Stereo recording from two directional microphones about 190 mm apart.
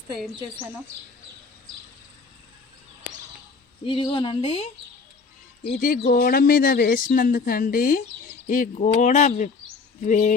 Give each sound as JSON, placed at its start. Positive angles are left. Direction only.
{"t": 3.8, "sound": "speech", "side_deg": 25}
{"t": 5.7, "sound": "speech", "side_deg": 45}